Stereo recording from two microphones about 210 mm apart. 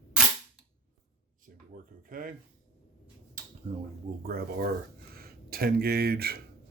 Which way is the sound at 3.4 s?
40° right (ahead or behind).